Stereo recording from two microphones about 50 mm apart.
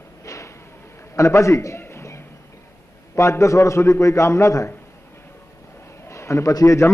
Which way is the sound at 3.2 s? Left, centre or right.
Left.